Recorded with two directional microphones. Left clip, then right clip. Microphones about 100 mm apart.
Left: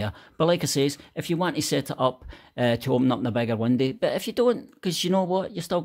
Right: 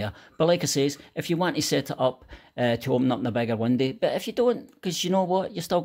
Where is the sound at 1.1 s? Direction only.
10° left (ahead or behind).